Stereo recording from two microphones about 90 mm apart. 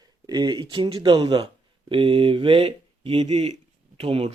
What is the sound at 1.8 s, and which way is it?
Speech, 80° right.